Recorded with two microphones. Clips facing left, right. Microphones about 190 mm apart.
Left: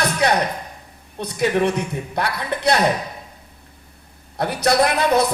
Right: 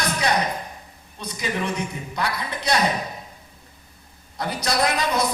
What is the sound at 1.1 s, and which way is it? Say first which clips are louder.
A man's voice: left 9 dB; 60° left (ahead or behind).